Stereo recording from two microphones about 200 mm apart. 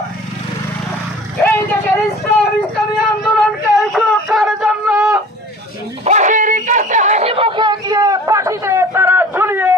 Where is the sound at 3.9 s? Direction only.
Centre (ahead or behind).